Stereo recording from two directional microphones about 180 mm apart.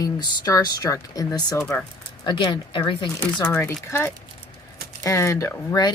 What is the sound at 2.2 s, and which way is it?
Speech, 25° left (ahead or behind).